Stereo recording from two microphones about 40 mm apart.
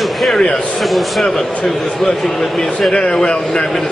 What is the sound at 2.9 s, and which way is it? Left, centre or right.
Speech, left.